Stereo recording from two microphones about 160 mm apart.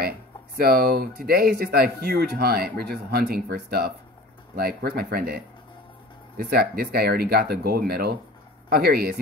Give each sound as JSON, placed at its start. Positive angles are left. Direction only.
{"t": 0.6, "sound": "speech", "side_deg": -75}